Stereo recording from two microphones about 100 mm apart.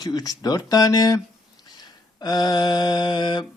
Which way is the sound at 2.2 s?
40° left (ahead or behind).